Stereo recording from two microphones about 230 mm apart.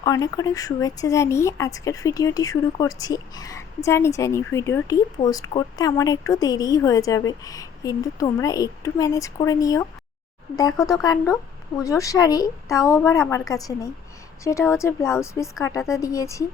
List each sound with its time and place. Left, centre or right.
0.0 s speech: centre